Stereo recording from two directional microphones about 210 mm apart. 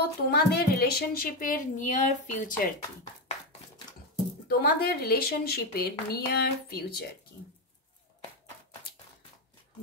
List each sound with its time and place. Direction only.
0.3 s a woman's voice: 50° left (ahead or behind)
4.5 s speech: 45° left (ahead or behind)